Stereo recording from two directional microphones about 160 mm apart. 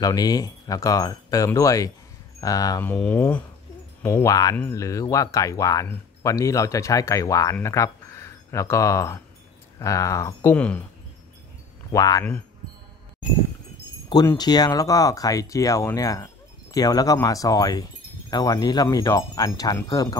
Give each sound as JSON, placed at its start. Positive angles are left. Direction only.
{"t": 0.0, "sound": "speech", "side_deg": 25}
{"t": 2.8, "sound": "speech", "side_deg": 10}
{"t": 10.5, "sound": "speech", "side_deg": 10}
{"t": 11.9, "sound": "speech", "side_deg": 20}
{"t": 14.0, "sound": "speech", "side_deg": 25}